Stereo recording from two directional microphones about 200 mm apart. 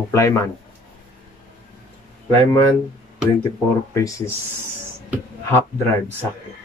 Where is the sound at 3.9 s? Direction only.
15° left (ahead or behind).